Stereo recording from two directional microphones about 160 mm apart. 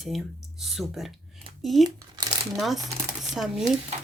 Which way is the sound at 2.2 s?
30° right (ahead or behind).